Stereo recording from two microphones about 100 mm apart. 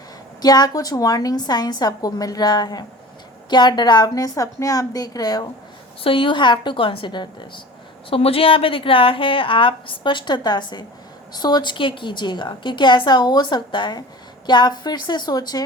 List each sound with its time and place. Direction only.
0.4 s a woman's voice: 40° left (ahead or behind)
6.0 s a woman's voice: 60° left (ahead or behind)
8.1 s a woman's voice: 70° left (ahead or behind); by 15.6 s 40° left (ahead or behind)